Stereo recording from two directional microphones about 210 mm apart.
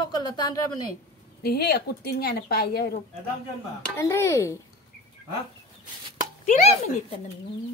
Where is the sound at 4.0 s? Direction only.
15° left (ahead or behind).